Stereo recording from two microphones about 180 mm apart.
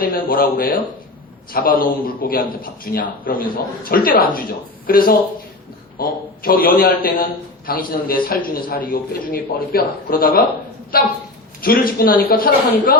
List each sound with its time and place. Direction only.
0.0 s a man's voice: 55° left (ahead or behind)